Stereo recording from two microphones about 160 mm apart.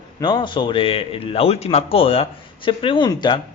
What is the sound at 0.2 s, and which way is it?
A man's voice, 25° left (ahead or behind).